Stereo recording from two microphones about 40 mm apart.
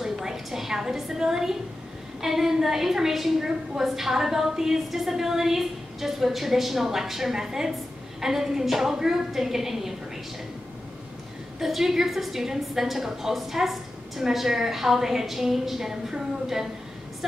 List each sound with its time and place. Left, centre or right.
0.0 s a sound: centre
2.2 s a woman's voice: centre
11.6 s a woman's voice: centre